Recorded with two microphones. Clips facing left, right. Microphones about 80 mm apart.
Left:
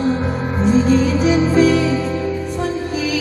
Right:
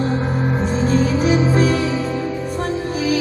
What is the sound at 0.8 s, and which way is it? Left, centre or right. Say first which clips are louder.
Music: left 2 dB; right.